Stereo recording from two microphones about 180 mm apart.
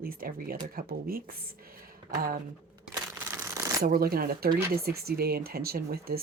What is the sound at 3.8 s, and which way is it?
Speech, 55° right (ahead or behind).